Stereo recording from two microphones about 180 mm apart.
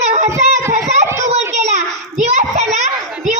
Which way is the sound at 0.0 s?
40° right (ahead or behind).